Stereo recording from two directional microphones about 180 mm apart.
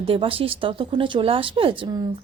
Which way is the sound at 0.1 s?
30° right (ahead or behind).